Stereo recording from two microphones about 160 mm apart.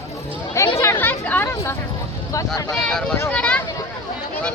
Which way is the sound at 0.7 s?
15° left (ahead or behind).